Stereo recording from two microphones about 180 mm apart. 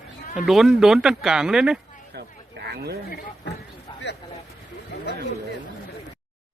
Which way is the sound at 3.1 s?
60° left (ahead or behind).